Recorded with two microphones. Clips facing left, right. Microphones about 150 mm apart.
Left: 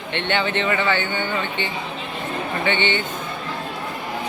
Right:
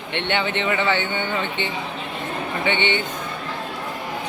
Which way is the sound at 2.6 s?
15° right (ahead or behind).